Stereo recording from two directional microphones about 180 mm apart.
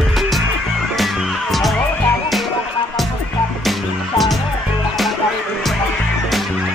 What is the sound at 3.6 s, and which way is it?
Music, centre (ahead or behind).